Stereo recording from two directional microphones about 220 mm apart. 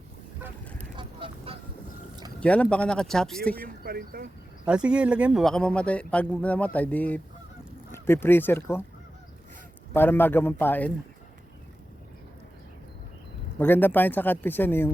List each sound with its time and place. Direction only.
0.9 s duck: 25° right (ahead or behind)
2.4 s speech: 5° left (ahead or behind)
3.8 s speech: 40° right (ahead or behind)
4.6 s speech: 5° right (ahead or behind)
9.9 s speech: 10° left (ahead or behind)
13.6 s speech: 10° left (ahead or behind)